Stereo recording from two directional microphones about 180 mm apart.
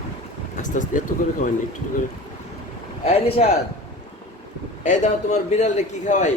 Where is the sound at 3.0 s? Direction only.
35° left (ahead or behind).